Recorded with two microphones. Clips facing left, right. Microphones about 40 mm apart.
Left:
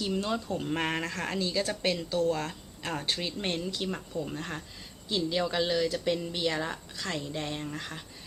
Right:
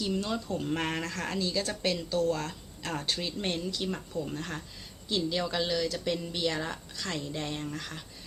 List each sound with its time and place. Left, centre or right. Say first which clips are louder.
0.2 s a woman's voice: left 1 dB; left; by 7.7 s centre
7.7 s a woman's voice: even; centre